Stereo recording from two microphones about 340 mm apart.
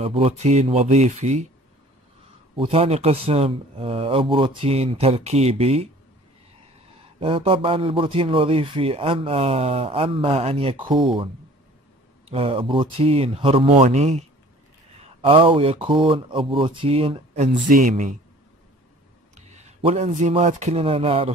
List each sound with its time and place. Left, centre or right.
0.0 s speech: centre
2.5 s a man's voice: centre
7.2 s a man's voice: centre
12.3 s a man's voice: centre
19.3 s speech: centre